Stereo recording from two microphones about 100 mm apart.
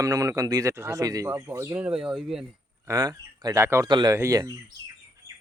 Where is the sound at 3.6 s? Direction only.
25° right (ahead or behind).